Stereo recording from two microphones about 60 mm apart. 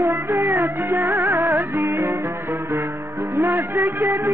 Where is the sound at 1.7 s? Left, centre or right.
Right.